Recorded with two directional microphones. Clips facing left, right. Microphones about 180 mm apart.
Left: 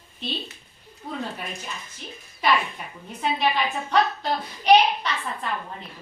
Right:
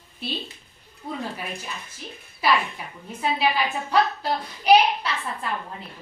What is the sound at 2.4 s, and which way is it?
A woman's voice, 10° right (ahead or behind).